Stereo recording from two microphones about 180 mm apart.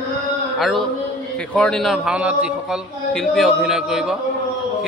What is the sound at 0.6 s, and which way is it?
A man's voice, centre (ahead or behind).